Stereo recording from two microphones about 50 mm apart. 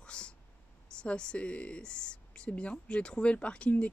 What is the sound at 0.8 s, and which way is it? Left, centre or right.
Speech, centre.